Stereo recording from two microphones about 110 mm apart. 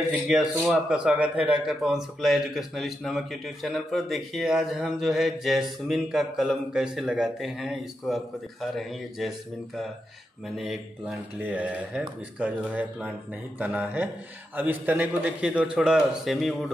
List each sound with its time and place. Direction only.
0.3 s speech: 5° right (ahead or behind)
10.6 s a man's voice: centre (ahead or behind)